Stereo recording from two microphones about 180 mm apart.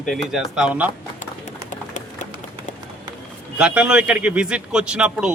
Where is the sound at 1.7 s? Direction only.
45° left (ahead or behind).